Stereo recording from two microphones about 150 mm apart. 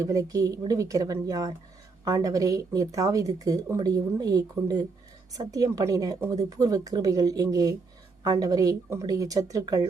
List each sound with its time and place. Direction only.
0.0 s a woman's voice: 20° right (ahead or behind)